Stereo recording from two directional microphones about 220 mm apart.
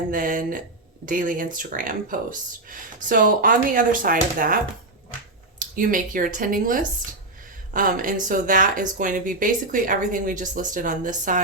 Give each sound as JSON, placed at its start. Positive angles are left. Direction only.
{"t": 0.1, "sound": "speech", "side_deg": -40}